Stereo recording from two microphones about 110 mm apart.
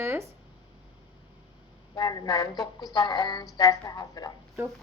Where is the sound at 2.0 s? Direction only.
35° left (ahead or behind).